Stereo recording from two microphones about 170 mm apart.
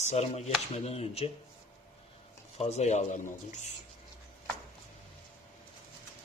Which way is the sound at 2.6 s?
40° left (ahead or behind).